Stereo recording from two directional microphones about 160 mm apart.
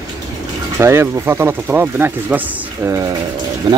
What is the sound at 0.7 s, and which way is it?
Speech, 15° right (ahead or behind).